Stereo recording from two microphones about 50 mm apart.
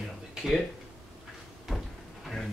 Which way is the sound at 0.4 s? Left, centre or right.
Centre.